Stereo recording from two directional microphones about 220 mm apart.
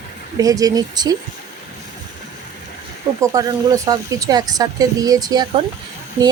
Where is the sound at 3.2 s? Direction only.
15° right (ahead or behind).